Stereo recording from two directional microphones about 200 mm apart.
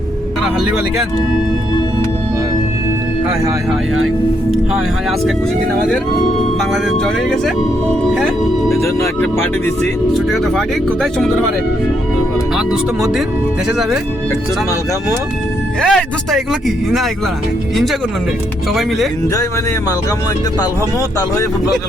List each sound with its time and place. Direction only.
7.0 s speech: 5° left (ahead or behind)
8.7 s speech: 10° left (ahead or behind)
12.5 s speech: centre (ahead or behind)
15.8 s speech: centre (ahead or behind)
18.7 s speech: centre (ahead or behind)